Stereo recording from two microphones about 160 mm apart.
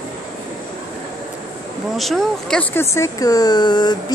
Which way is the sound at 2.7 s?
15° left (ahead or behind).